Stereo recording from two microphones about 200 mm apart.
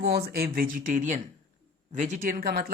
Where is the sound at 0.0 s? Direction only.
55° right (ahead or behind).